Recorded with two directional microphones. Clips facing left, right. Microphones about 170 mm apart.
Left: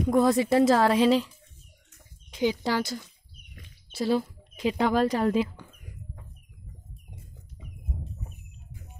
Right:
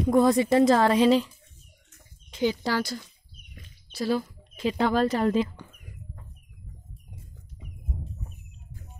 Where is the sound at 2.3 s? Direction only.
15° left (ahead or behind).